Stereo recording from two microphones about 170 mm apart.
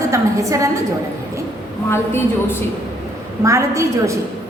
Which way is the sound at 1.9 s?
15° left (ahead or behind).